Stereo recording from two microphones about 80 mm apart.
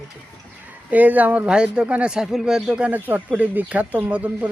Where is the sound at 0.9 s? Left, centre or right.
Centre.